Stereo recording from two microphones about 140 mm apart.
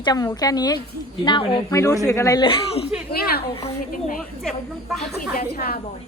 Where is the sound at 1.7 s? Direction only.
25° left (ahead or behind).